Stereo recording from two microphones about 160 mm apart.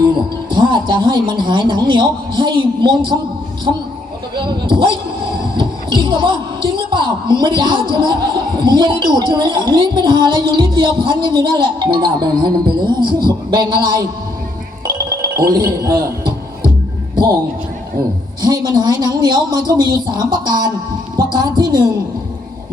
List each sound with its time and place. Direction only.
0.1 s a man's voice: 30° right (ahead or behind)
14.8 s music: 25° right (ahead or behind)
15.4 s speech: 25° right (ahead or behind)
18.4 s speech: 25° right (ahead or behind)